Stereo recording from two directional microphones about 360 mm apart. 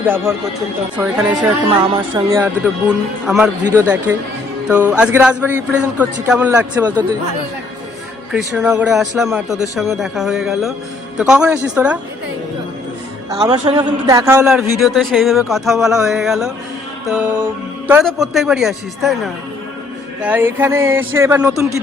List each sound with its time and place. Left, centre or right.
0.0 s speech: centre
8.3 s speech: centre
13.4 s speech: centre